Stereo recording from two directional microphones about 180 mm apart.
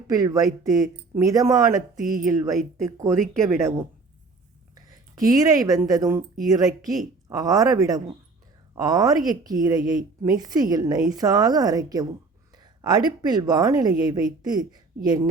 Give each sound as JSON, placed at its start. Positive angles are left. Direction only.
{"t": 0.1, "sound": "a woman's voice", "side_deg": -20}
{"t": 3.6, "sound": "a woman's voice", "side_deg": -15}